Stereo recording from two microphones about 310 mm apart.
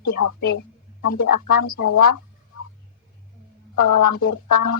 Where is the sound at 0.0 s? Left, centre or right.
Left.